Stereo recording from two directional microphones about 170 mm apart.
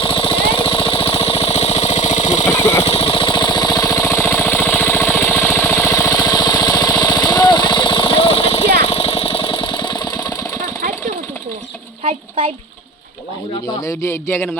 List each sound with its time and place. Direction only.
0.0 s jackhammer: 30° left (ahead or behind)
2.5 s a sound: 15° left (ahead or behind)
2.8 s jackhammer: 35° left (ahead or behind)
8.8 s engine: 35° left (ahead or behind); by 10.6 s 20° left (ahead or behind)
13.8 s speech: 15° left (ahead or behind)